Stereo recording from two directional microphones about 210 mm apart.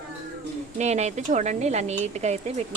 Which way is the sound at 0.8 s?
35° right (ahead or behind).